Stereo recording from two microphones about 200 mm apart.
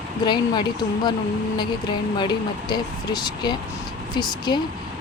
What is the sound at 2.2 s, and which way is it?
Speech, 20° left (ahead or behind).